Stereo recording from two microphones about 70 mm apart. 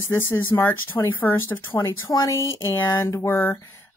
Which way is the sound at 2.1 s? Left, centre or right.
Left.